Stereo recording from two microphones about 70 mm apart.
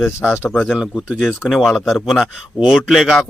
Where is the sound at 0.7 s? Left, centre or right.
Centre.